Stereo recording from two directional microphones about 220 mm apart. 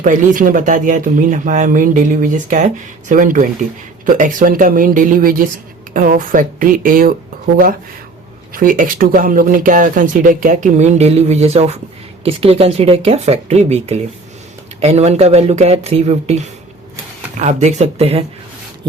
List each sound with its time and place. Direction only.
0.0 s speech: 35° right (ahead or behind)
17.4 s speech: 30° right (ahead or behind)